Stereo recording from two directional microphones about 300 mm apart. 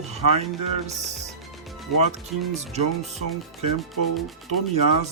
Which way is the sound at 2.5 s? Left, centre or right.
Right.